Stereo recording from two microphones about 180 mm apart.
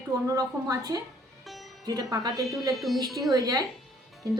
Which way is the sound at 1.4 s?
Centre (ahead or behind).